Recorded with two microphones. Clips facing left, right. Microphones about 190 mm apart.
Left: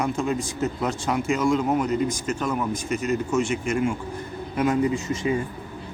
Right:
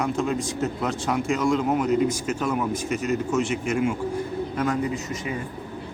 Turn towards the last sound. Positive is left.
turn(degrees=25)  # may be behind; listen again after turning